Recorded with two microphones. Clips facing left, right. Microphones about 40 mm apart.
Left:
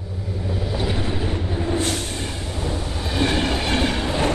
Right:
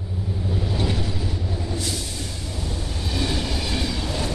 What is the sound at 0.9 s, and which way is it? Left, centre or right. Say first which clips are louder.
Vehicle: left 3 dB; left.